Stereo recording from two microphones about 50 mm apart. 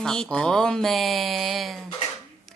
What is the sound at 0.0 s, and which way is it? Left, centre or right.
Speech, centre.